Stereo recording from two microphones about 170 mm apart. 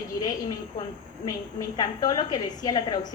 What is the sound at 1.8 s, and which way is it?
A woman's voice, 25° left (ahead or behind).